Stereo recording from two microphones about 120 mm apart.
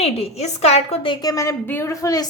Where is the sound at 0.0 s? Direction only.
60° left (ahead or behind).